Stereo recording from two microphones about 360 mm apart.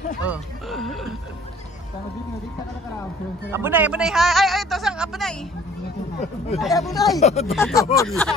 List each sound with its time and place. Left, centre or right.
0.3 s a man's voice: centre
3.5 s a man's voice: centre
6.6 s a man's voice: centre
7.2 s speech: centre
7.5 s a man's voice: centre